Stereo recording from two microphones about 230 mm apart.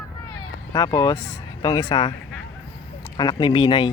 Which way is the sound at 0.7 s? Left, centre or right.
Centre.